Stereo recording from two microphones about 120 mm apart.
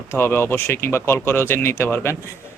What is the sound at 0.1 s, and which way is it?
Speech, 20° left (ahead or behind).